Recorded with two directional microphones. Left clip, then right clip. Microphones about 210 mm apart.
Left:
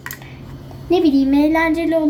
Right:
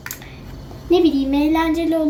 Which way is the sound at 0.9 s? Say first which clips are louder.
Left 1 dB; 45° left (ahead or behind).